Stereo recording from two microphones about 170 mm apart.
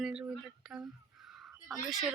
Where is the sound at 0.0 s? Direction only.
5° right (ahead or behind).